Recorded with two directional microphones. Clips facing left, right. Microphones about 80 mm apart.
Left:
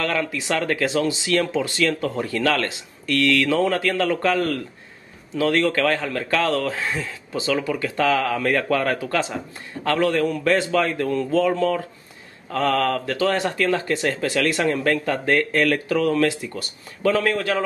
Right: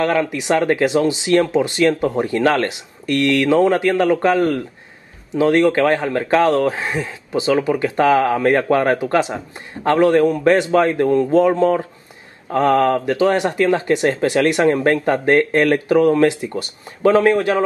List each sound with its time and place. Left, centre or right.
0.0 s speech: right